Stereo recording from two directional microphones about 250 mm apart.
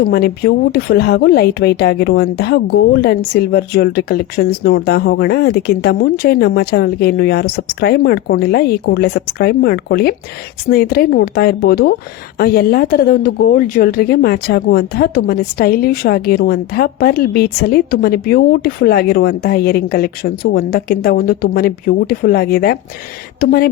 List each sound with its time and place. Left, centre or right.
0.0 s a woman's voice: left